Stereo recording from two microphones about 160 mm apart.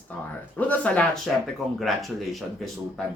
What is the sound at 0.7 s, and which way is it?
Speech, 10° left (ahead or behind).